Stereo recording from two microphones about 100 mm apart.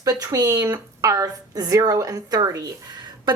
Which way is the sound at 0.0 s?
40° right (ahead or behind).